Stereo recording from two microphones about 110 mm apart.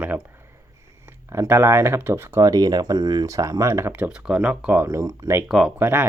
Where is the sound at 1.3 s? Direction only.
25° right (ahead or behind).